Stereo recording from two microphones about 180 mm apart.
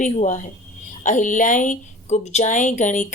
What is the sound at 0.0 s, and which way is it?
A woman's voice, 40° left (ahead or behind).